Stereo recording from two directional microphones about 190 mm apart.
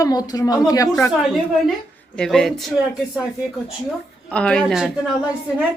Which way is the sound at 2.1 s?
5° left (ahead or behind).